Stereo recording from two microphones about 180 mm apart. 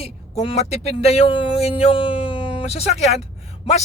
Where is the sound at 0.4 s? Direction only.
35° left (ahead or behind).